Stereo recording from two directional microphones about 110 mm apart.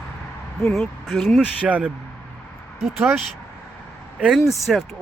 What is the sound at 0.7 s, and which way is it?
Speech, centre (ahead or behind).